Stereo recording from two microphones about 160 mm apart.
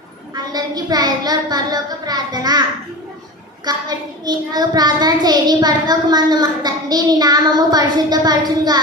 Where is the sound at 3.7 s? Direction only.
25° right (ahead or behind).